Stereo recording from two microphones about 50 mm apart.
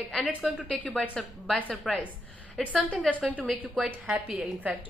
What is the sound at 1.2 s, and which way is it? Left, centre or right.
Speech, centre.